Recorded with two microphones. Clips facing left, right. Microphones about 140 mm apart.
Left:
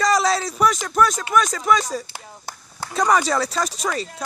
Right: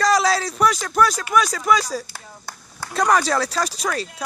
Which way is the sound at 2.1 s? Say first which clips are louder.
Left 1 dB; 15° left (ahead or behind).